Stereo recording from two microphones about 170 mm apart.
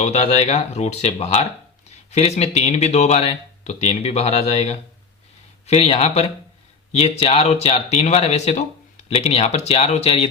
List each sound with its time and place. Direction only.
0.0 s speech: 40° left (ahead or behind)